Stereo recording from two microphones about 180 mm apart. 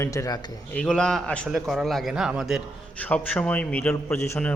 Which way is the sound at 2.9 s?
10° left (ahead or behind).